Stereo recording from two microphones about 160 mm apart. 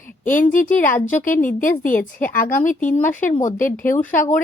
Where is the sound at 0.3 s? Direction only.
55° left (ahead or behind).